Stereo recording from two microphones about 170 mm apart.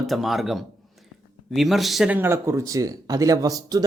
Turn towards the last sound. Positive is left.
turn(degrees=-20)  # may be behind; listen again after turning